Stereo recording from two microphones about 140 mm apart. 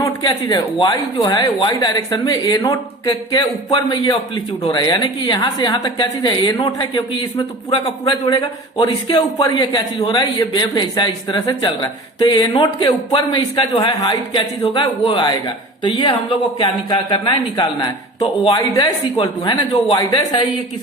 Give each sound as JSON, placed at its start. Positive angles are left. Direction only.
{"t": 0.0, "sound": "a man's voice", "side_deg": 30}